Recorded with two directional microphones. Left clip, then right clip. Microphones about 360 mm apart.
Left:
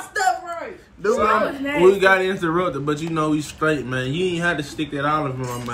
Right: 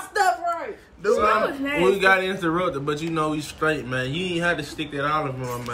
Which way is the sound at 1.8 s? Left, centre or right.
Centre.